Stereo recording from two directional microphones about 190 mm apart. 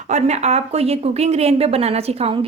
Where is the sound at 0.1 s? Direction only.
35° right (ahead or behind).